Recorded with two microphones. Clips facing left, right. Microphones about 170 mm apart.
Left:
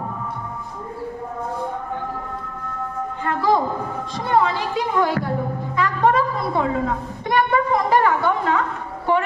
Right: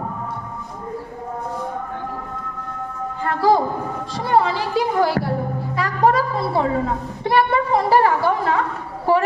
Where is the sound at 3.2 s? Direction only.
35° right (ahead or behind).